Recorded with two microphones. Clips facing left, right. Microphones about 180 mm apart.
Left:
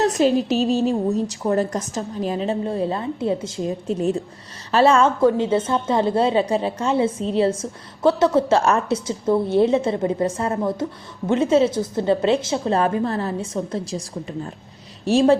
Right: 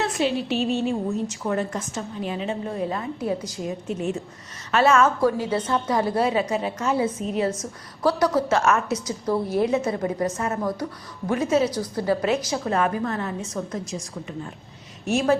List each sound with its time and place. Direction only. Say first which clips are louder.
0.0 s a woman's voice: left 6 dB; 40° left (ahead or behind)